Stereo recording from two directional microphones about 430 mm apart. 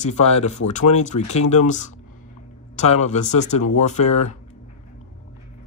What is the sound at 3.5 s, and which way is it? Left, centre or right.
Speech, centre.